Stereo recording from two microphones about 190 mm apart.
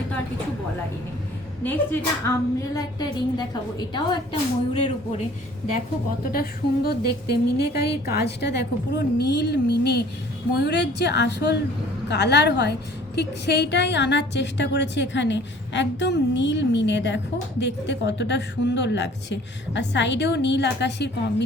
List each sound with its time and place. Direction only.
1.6 s speech: 10° left (ahead or behind)
2.7 s a woman's voice: 20° left (ahead or behind)
6.3 s a woman's voice: 55° left (ahead or behind)